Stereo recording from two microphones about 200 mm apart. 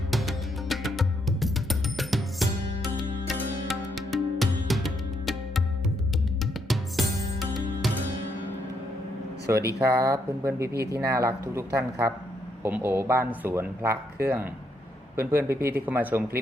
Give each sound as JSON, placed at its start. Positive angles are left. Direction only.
{"t": 0.1, "sound": "music", "side_deg": 0}
{"t": 9.6, "sound": "speech", "side_deg": -55}
{"t": 9.8, "sound": "speech", "side_deg": -15}